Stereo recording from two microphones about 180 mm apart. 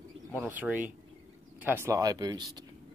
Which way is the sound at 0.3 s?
10° right (ahead or behind).